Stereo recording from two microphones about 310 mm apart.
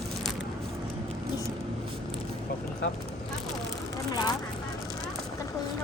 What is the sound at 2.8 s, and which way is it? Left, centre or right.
Speech, left.